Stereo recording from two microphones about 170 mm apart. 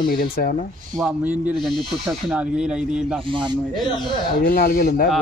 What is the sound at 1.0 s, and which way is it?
Speech, 5° right (ahead or behind).